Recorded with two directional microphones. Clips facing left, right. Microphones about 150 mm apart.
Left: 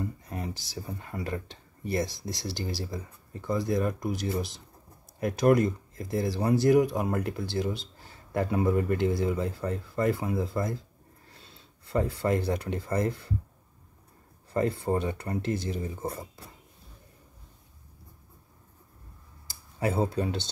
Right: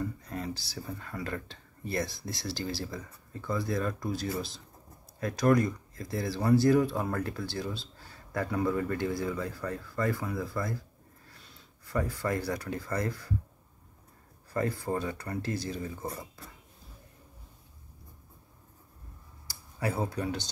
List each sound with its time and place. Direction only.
0.0 s a sound: 20° left (ahead or behind)
1.2 s speech: 20° left (ahead or behind)
14.5 s speech: 25° left (ahead or behind)
19.8 s speech: 25° left (ahead or behind)